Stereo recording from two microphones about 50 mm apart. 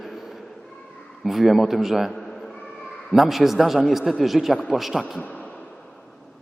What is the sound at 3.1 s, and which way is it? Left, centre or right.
A man's voice, centre.